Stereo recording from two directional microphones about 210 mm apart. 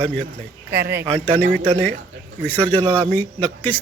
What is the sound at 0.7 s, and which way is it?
Speech, 55° right (ahead or behind).